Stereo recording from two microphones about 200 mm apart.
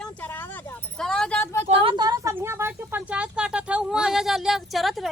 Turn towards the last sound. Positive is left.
turn(degrees=0)  # may be behind; listen again after turning